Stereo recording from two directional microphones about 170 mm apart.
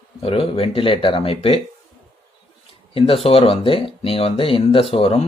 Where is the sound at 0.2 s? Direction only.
35° left (ahead or behind).